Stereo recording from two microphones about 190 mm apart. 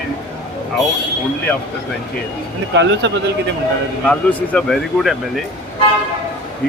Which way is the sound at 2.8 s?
65° right (ahead or behind).